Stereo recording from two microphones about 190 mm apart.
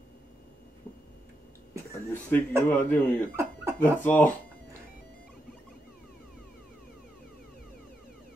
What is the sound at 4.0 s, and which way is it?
Speech, 10° left (ahead or behind).